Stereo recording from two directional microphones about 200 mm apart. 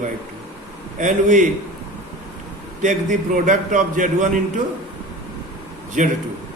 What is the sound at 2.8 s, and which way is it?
A man's voice, 40° right (ahead or behind).